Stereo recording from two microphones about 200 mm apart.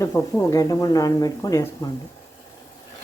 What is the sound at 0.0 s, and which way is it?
Speech, 15° left (ahead or behind).